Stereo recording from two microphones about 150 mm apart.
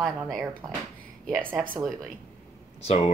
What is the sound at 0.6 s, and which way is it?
Speech, 25° right (ahead or behind).